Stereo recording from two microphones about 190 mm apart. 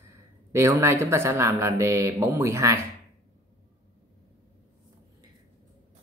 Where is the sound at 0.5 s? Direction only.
15° right (ahead or behind).